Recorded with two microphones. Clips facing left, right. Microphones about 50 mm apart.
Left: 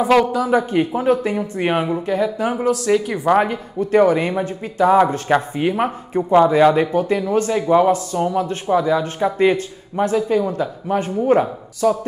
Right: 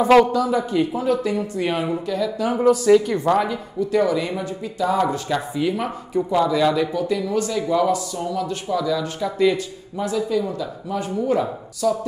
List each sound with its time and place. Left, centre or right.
0.0 s speech: centre
0.5 s speech: left
2.9 s speech: centre
3.3 s speech: left